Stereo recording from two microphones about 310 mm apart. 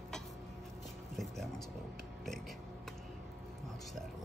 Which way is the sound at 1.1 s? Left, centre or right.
Centre.